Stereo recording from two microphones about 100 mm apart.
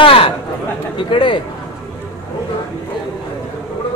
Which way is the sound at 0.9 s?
55° left (ahead or behind).